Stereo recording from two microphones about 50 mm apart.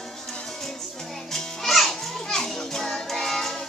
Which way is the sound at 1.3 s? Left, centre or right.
Centre.